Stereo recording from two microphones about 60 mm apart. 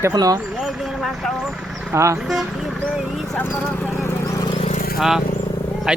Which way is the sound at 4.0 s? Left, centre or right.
Left.